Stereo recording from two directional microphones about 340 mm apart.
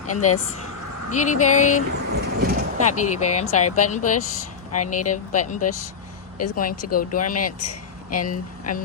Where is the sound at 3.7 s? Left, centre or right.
Left.